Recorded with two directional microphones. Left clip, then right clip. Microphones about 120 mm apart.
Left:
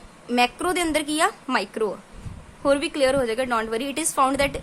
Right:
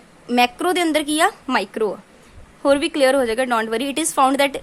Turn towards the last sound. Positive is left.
turn(degrees=-40)  # may be behind; listen again after turning